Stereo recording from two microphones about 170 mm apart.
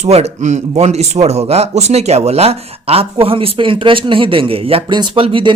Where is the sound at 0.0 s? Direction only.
40° right (ahead or behind).